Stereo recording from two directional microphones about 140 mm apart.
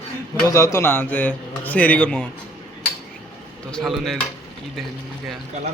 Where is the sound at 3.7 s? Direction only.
Centre (ahead or behind).